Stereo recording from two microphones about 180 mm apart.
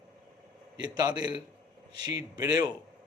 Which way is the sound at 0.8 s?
20° right (ahead or behind).